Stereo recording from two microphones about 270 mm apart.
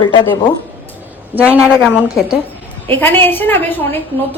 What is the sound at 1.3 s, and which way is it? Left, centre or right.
A woman's voice, centre.